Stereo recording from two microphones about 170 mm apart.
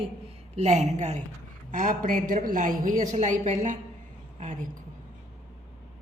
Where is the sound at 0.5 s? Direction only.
40° right (ahead or behind).